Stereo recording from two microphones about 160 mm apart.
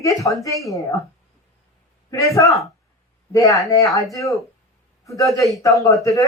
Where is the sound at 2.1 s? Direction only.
20° left (ahead or behind).